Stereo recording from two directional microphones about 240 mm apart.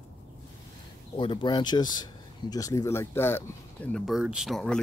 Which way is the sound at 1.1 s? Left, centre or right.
Centre.